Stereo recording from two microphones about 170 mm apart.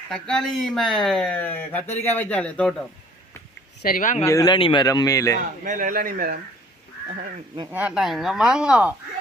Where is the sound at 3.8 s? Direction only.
50° left (ahead or behind).